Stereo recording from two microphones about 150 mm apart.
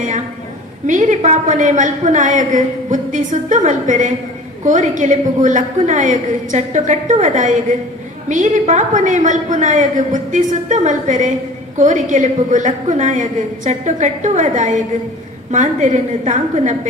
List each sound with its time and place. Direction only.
0.9 s a woman's voice: 55° right (ahead or behind)